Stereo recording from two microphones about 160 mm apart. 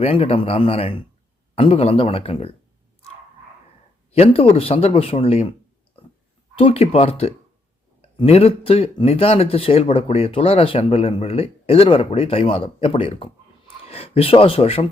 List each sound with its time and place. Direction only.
0.0 s speech: 35° left (ahead or behind)
4.1 s speech: 40° left (ahead or behind)
6.6 s speech: 35° left (ahead or behind)